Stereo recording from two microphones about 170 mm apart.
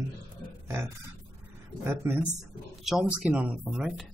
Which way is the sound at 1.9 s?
15° right (ahead or behind).